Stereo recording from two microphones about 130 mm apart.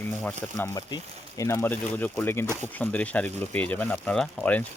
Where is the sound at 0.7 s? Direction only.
25° left (ahead or behind).